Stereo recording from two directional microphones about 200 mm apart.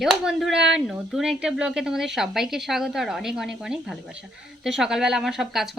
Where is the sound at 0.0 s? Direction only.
Centre (ahead or behind).